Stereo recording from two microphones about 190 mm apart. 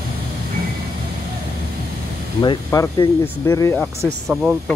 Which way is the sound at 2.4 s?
25° left (ahead or behind).